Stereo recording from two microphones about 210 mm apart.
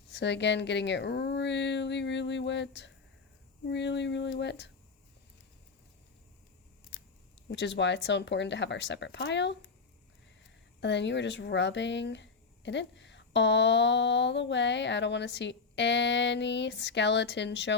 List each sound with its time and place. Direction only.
0.1 s speech: 55° left (ahead or behind)
7.4 s speech: 55° left (ahead or behind)
10.8 s speech: 55° left (ahead or behind)